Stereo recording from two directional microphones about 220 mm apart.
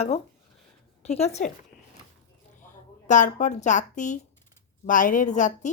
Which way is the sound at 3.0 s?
35° left (ahead or behind).